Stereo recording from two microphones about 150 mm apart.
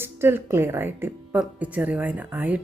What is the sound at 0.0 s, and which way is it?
A woman's voice, 15° right (ahead or behind).